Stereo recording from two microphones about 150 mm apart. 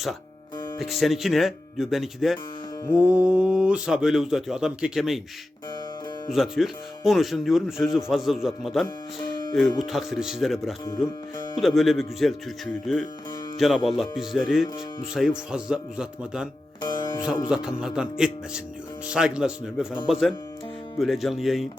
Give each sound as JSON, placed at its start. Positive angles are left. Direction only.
{"t": 0.8, "sound": "speech", "side_deg": 0}
{"t": 6.3, "sound": "speech", "side_deg": 0}
{"t": 13.6, "sound": "speech", "side_deg": 0}
{"t": 16.8, "sound": "music", "side_deg": 30}
{"t": 17.5, "sound": "speech", "side_deg": -5}